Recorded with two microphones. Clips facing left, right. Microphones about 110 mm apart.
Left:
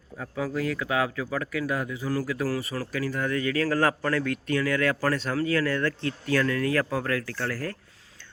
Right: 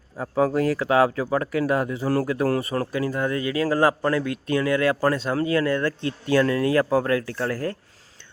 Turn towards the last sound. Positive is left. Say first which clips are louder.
# right 5 dB
turn(degrees=-25)  # may be behind; listen again after turning